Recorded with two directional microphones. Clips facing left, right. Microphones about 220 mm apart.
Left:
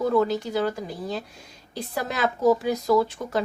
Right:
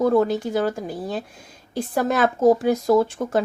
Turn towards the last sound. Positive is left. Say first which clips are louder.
# right 3 dB
turn(degrees=-50)  # may be behind; listen again after turning